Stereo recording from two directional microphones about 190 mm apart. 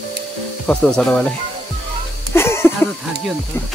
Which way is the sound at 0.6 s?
5° left (ahead or behind).